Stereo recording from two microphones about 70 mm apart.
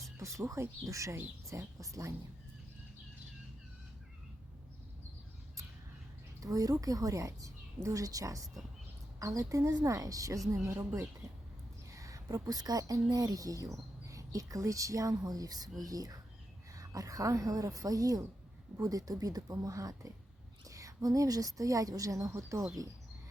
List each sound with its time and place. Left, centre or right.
0.2 s speech: right
6.4 s a woman's voice: right